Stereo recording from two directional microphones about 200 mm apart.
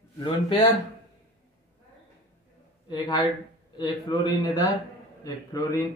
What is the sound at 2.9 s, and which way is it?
A man's voice, 20° left (ahead or behind).